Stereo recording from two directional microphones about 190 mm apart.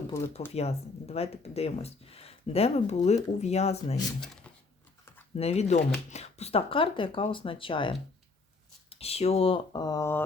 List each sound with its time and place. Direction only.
0.1 s speech: 15° left (ahead or behind)
0.5 s speech: 35° left (ahead or behind)
5.4 s speech: 35° left (ahead or behind); by 10.2 s 15° left (ahead or behind)